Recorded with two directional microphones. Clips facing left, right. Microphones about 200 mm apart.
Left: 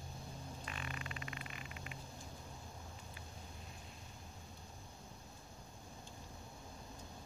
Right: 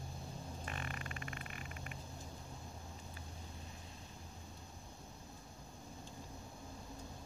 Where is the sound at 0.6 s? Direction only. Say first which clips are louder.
Right 2 dB; 45° right (ahead or behind).